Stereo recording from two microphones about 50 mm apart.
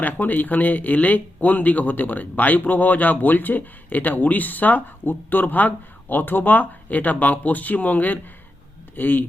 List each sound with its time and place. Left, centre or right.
0.0 s speech: left